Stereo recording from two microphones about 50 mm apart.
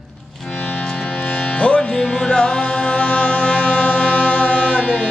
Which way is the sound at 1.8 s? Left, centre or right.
Centre.